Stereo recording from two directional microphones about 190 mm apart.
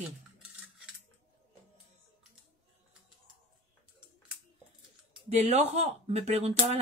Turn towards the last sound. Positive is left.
turn(degrees=-35)  # may be behind; listen again after turning